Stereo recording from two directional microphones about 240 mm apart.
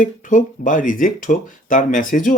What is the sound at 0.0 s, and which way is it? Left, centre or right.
Speech, left.